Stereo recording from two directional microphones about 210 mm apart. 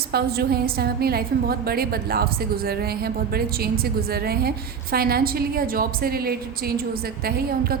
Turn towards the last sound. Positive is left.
turn(degrees=-45)  # may be behind; listen again after turning